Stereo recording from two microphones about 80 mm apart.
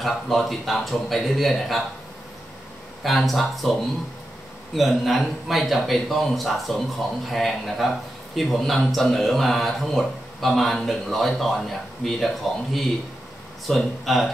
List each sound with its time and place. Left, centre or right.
0.0 s a man's voice: centre
3.0 s a man's voice: centre
4.7 s a man's voice: centre
13.7 s a man's voice: centre